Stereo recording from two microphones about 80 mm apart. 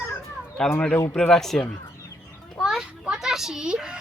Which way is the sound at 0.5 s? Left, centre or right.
Centre.